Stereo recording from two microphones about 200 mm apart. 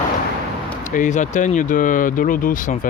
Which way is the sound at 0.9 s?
40° left (ahead or behind).